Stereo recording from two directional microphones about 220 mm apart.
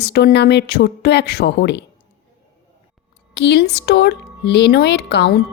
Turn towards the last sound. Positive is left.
turn(degrees=45)  # may be behind; listen again after turning